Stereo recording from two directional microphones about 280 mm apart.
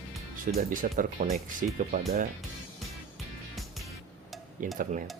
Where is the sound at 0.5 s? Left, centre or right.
Right.